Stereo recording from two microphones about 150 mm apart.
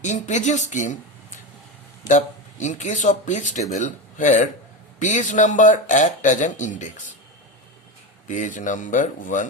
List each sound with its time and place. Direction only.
0.0 s speech: 50° left (ahead or behind)
2.0 s a man's voice: 55° left (ahead or behind)
8.3 s a man's voice: 55° left (ahead or behind)